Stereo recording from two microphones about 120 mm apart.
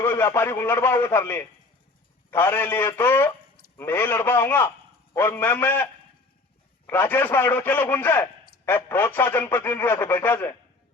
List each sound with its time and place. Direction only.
0.0 s a man's voice: 20° left (ahead or behind)